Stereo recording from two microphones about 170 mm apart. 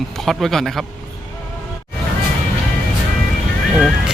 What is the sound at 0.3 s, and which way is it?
Speech, centre (ahead or behind).